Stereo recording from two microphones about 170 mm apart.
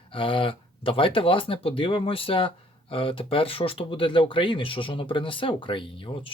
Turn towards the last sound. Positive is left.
turn(degrees=30)  # may be behind; listen again after turning